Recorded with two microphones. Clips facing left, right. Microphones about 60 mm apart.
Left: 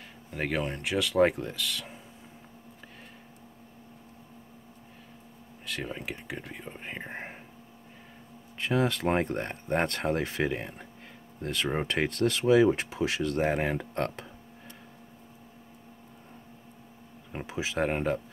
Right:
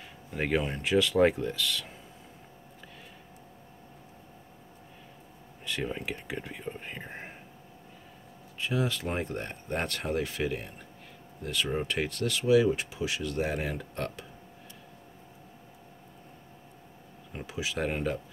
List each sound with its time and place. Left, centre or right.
0.3 s speech: centre
5.7 s speech: centre
6.8 s speech: centre
8.5 s speech: left
17.3 s speech: left